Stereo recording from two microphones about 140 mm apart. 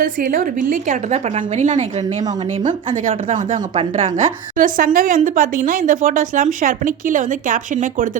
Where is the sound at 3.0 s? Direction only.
70° right (ahead or behind).